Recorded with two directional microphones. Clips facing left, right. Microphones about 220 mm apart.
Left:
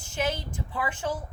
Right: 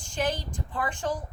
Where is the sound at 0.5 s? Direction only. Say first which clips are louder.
Even; 5° left (ahead or behind).